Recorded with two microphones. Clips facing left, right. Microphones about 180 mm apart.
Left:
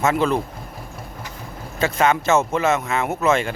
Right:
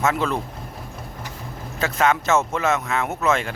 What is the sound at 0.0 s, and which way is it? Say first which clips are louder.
Speech: left 3 dB; centre (ahead or behind).